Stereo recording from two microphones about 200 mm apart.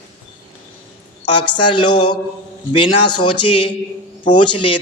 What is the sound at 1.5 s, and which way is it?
A man's voice, 25° left (ahead or behind).